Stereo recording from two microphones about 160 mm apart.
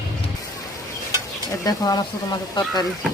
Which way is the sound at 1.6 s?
25° left (ahead or behind).